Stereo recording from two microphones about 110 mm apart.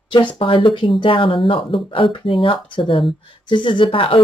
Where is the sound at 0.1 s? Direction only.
45° left (ahead or behind).